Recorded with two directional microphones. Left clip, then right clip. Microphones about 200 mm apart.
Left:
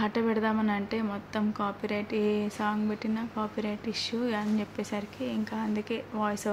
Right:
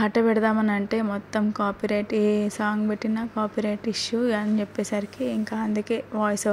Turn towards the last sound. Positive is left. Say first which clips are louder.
# right 6 dB
turn(degrees=-25)  # may be behind; listen again after turning